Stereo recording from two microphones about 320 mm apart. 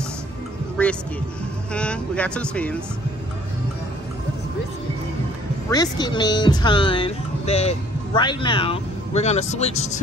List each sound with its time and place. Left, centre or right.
0.8 s speech: centre
5.7 s speech: centre